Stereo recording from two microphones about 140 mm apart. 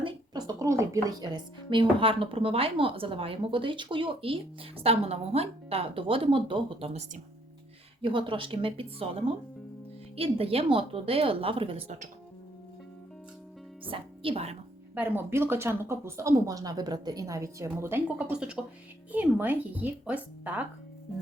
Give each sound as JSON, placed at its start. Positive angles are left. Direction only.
{"t": 0.0, "sound": "a woman's voice", "side_deg": -25}
{"t": 8.0, "sound": "a woman's voice", "side_deg": -40}
{"t": 13.8, "sound": "speech", "side_deg": -40}
{"t": 14.9, "sound": "speech", "side_deg": -15}